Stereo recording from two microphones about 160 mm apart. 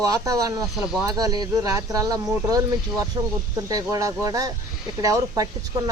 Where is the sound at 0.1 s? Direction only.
20° right (ahead or behind).